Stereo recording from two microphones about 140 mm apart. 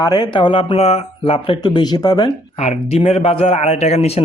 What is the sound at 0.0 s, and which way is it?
Speech, 30° left (ahead or behind).